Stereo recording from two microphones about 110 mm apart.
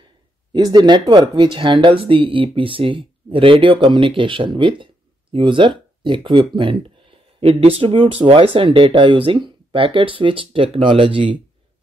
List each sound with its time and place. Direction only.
0.5 s speech: 40° right (ahead or behind)